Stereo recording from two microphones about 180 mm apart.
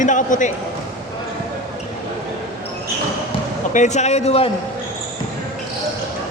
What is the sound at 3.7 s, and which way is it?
Speech, 40° left (ahead or behind).